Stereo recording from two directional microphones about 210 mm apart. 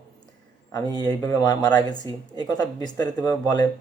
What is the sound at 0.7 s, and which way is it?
Speech, 20° left (ahead or behind).